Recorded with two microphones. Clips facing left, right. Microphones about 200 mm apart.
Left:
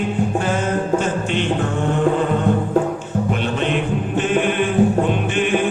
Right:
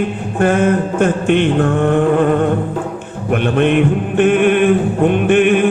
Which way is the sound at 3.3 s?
55° right (ahead or behind).